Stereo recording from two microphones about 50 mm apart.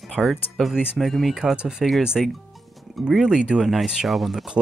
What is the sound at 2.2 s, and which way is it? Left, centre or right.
Speech, centre.